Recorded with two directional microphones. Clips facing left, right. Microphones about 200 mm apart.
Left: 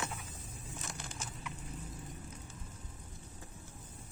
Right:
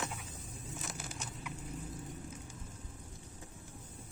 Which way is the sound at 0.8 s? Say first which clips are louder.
Right 1 dB; 5° right (ahead or behind).